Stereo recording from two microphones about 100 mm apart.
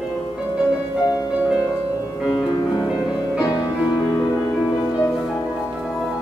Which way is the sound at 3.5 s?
45° left (ahead or behind).